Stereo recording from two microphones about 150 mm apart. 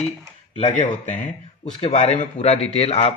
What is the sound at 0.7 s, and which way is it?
Speech, 50° left (ahead or behind).